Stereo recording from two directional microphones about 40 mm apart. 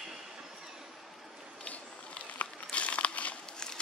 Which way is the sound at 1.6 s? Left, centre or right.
Left.